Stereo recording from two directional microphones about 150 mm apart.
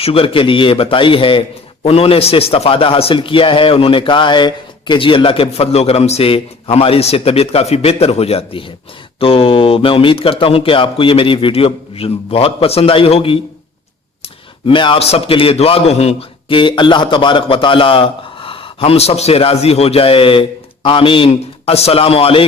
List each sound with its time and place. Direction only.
0.0 s a man's voice: 40° left (ahead or behind)
14.7 s a man's voice: 35° left (ahead or behind)